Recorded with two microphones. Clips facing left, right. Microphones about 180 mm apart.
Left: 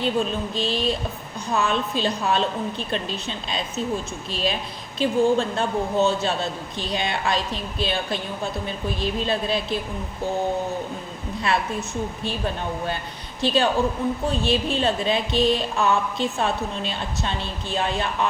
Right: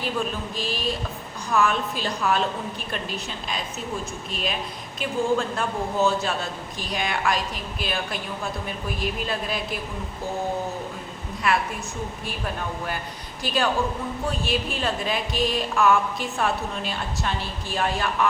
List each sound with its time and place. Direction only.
0.5 s music: 25° left (ahead or behind)
11.5 s music: 25° left (ahead or behind)